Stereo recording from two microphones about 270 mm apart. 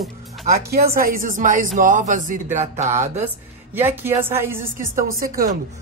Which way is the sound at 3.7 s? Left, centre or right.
Centre.